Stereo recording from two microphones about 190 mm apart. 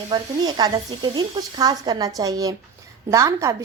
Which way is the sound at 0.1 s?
20° right (ahead or behind).